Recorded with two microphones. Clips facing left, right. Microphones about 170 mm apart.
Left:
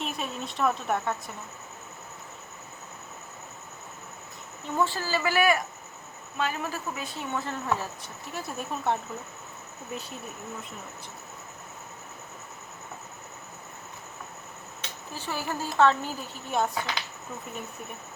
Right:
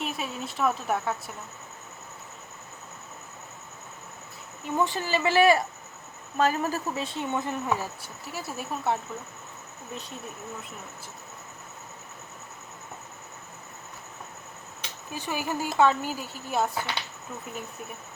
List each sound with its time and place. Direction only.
0.0 s speech: 5° right (ahead or behind)
4.8 s speech: 20° right (ahead or behind)
6.3 s a woman's voice: 40° right (ahead or behind)
7.0 s speech: 25° right (ahead or behind); by 9.0 s 5° right (ahead or behind)
15.1 s speech: 15° right (ahead or behind)